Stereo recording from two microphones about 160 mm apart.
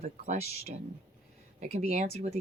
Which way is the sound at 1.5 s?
45° right (ahead or behind).